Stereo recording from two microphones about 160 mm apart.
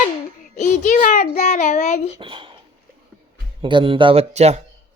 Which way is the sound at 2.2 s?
30° right (ahead or behind).